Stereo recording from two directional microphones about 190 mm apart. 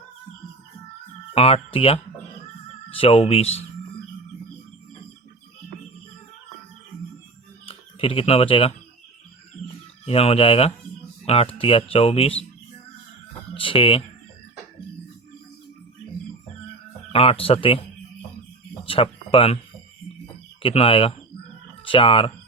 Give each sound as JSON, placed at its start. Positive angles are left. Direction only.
{"t": 1.3, "sound": "speech", "side_deg": 30}
{"t": 7.7, "sound": "speech", "side_deg": 30}
{"t": 10.1, "sound": "speech", "side_deg": 30}
{"t": 13.5, "sound": "speech", "side_deg": 30}
{"t": 17.1, "sound": "speech", "side_deg": 30}
{"t": 19.3, "sound": "speech", "side_deg": 30}
{"t": 20.6, "sound": "speech", "side_deg": 30}